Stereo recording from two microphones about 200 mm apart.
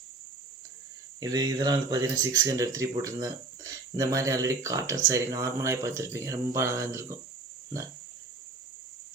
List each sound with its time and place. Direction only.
1.2 s speech: 15° right (ahead or behind)